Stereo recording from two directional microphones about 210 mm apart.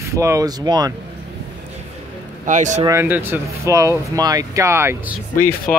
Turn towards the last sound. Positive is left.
turn(degrees=5)  # may be behind; listen again after turning